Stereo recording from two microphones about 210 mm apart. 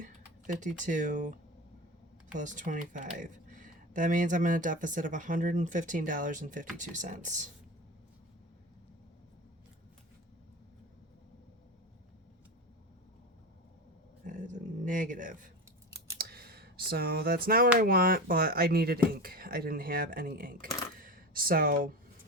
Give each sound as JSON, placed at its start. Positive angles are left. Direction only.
{"t": 0.0, "sound": "speech", "side_deg": -40}
{"t": 14.3, "sound": "a sound", "side_deg": -40}
{"t": 17.7, "sound": "speech", "side_deg": -45}